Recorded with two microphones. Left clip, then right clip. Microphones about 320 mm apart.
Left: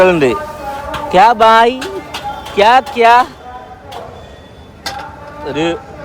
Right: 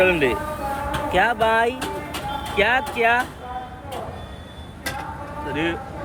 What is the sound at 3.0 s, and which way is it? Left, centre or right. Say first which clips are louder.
Speech: left 10 dB; left.